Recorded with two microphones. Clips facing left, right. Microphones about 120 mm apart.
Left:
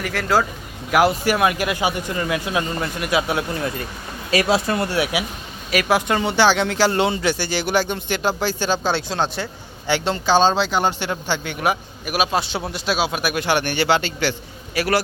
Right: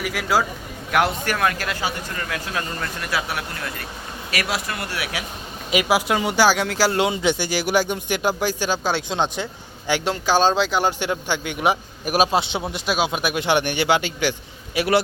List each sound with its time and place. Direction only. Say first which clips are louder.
0.0 s speech: left 2 dB; 5° right (ahead or behind)
0.9 s speech: left 4 dB; 5° left (ahead or behind); by 5.0 s 25° left (ahead or behind)
5.7 s speech: left 1 dB; 5° right (ahead or behind)
12.0 s a man's voice: right 3 dB; 40° right (ahead or behind)
12.7 s a man's voice: left 1 dB; 10° right (ahead or behind)